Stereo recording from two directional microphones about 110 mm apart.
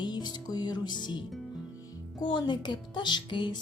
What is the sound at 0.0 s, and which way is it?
Music, 40° left (ahead or behind).